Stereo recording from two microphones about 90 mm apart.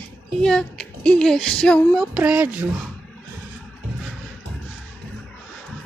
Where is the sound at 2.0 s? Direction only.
10° right (ahead or behind).